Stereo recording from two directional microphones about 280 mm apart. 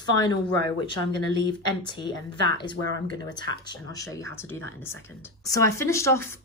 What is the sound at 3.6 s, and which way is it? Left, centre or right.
A woman's voice, centre.